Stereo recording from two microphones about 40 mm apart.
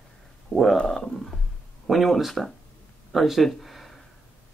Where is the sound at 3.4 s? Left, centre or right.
Centre.